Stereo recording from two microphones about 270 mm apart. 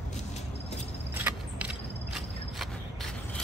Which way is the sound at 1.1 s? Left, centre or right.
Centre.